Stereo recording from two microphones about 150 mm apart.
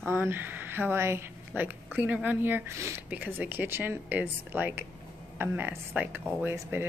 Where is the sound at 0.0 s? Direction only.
15° right (ahead or behind).